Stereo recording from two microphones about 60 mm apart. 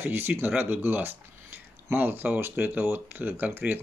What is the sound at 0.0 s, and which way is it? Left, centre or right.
Speech, right.